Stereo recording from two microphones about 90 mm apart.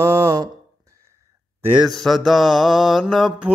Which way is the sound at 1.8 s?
Centre (ahead or behind).